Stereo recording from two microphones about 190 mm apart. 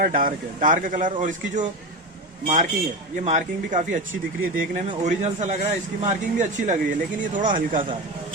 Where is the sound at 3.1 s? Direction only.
40° right (ahead or behind).